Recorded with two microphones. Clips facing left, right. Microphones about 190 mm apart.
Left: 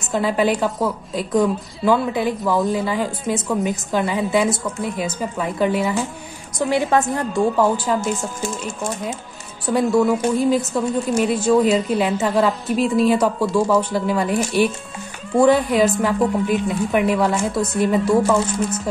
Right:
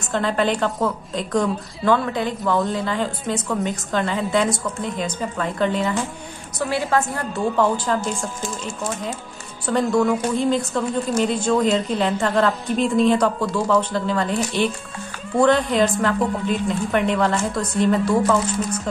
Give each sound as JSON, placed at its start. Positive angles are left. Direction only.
{"t": 0.1, "sound": "a woman's voice", "side_deg": 10}
{"t": 9.7, "sound": "a woman's voice", "side_deg": 10}